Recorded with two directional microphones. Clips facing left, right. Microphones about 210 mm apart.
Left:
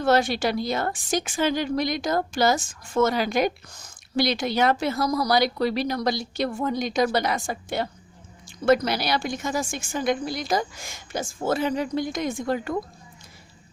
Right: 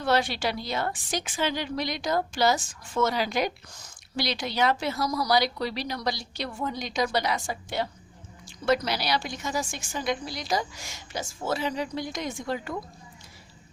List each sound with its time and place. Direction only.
0.0 s a woman's voice: 45° left (ahead or behind)